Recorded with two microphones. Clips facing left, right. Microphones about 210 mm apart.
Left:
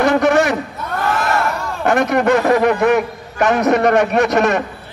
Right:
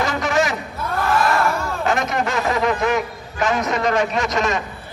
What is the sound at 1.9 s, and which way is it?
Speech, 60° left (ahead or behind).